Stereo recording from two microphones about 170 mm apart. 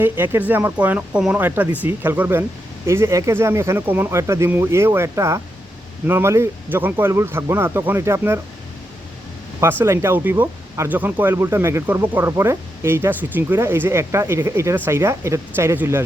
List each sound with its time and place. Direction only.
0.0 s speech: 10° right (ahead or behind)
9.6 s speech: 15° right (ahead or behind)